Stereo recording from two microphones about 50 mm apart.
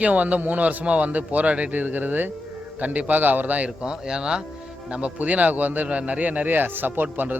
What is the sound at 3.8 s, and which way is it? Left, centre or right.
A man's voice, centre.